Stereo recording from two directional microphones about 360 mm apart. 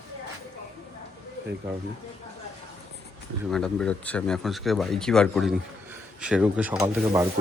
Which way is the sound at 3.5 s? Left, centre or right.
Centre.